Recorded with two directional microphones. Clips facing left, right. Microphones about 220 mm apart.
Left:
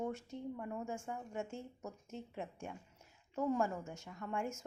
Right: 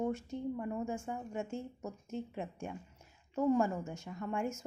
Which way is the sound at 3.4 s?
20° right (ahead or behind).